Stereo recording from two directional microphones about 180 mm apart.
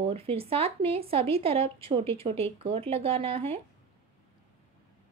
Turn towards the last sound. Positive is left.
turn(degrees=-30)  # may be behind; listen again after turning